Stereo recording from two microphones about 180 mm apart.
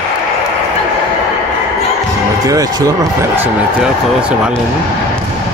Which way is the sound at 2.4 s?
20° right (ahead or behind).